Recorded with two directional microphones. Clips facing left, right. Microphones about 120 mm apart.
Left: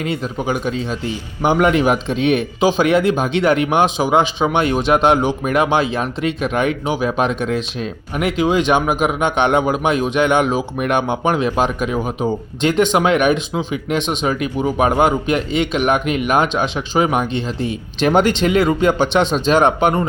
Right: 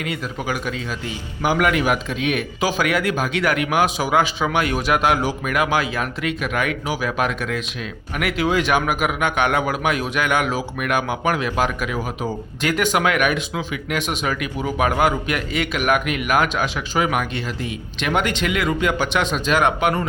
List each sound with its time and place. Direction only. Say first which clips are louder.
0.0 s a man's voice: left 5 dB; 25° left (ahead or behind)